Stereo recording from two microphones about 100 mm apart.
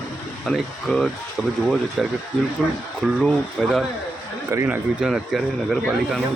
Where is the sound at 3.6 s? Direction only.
5° left (ahead or behind).